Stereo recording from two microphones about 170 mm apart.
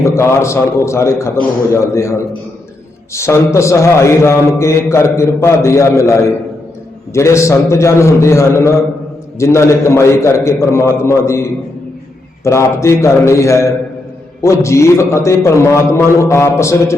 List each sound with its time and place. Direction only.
0.0 s a man's voice: 15° left (ahead or behind)